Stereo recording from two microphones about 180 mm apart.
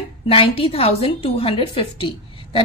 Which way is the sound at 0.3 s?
30° left (ahead or behind).